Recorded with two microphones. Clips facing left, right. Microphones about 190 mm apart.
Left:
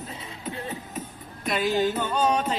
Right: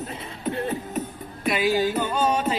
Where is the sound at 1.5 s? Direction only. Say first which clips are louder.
Right 2 dB; 10° right (ahead or behind).